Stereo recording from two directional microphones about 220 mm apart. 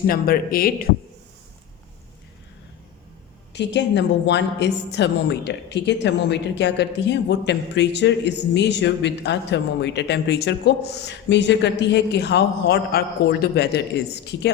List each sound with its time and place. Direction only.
0.1 s speech: 40° left (ahead or behind)
3.5 s a woman's voice: 50° left (ahead or behind)